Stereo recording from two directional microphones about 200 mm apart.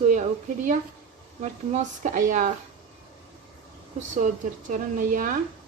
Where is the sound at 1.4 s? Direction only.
35° right (ahead or behind).